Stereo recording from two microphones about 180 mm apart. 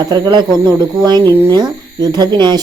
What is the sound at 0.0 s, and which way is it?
Speech, 20° right (ahead or behind).